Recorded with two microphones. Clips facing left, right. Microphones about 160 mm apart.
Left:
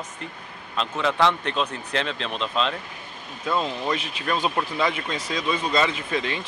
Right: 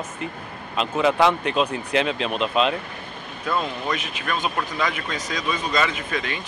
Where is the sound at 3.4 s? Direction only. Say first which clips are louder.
Even; 25° left (ahead or behind).